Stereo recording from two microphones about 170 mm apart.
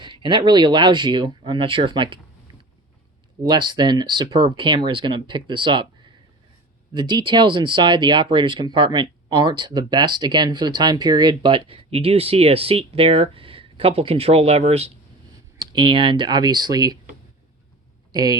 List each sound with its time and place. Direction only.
0.0 s speech: 30° right (ahead or behind)
3.4 s speech: 25° right (ahead or behind)
6.9 s speech: 25° right (ahead or behind)
15.5 s speech: 30° right (ahead or behind)
18.1 s speech: 25° right (ahead or behind)